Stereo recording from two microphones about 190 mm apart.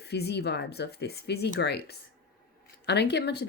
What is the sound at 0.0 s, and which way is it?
Speech, 60° left (ahead or behind).